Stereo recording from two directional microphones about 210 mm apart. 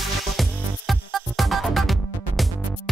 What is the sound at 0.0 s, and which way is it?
Music, centre (ahead or behind).